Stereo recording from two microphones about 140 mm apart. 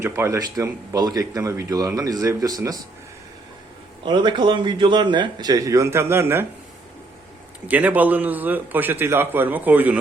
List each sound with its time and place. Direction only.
0.0 s speech: 20° right (ahead or behind)
4.0 s a man's voice: 35° right (ahead or behind); by 6.4 s 20° right (ahead or behind)
7.7 s a man's voice: 10° right (ahead or behind)